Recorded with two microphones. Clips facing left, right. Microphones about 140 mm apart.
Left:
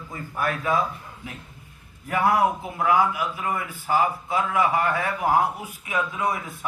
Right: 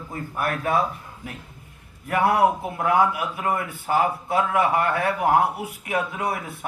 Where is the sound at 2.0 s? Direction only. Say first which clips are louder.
Right 2 dB; 65° right (ahead or behind).